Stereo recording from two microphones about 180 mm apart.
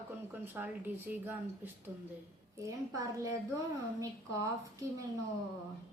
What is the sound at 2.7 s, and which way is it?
A woman's voice, 20° right (ahead or behind).